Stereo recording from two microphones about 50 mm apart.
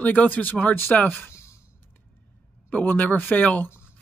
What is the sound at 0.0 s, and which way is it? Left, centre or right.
Speech, left.